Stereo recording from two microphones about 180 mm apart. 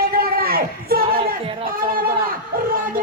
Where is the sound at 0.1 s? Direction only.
55° right (ahead or behind).